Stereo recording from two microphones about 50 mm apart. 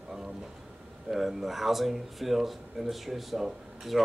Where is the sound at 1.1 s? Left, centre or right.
Centre.